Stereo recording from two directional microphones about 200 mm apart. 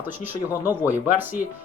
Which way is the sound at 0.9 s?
10° right (ahead or behind).